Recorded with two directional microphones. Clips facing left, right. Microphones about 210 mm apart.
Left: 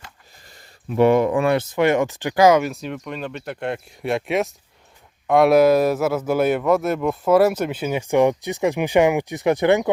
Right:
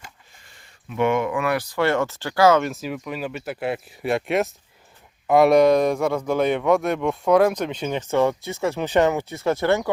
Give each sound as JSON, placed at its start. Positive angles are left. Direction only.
{"t": 0.4, "sound": "speech", "side_deg": 40}
{"t": 2.6, "sound": "speech", "side_deg": 0}